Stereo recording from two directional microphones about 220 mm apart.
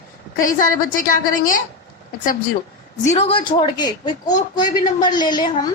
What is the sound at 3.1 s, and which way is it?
A woman's voice, 25° left (ahead or behind).